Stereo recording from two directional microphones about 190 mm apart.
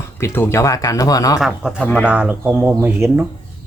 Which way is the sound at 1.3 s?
5° right (ahead or behind).